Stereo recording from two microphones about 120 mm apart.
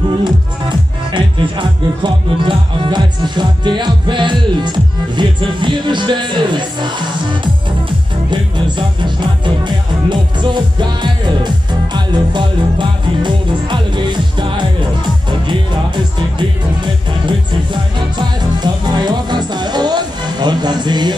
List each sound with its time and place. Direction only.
1.1 s speech: 45° right (ahead or behind)
8.3 s music: 40° right (ahead or behind)
10.0 s speech: 40° right (ahead or behind)
16.3 s speech: 40° right (ahead or behind)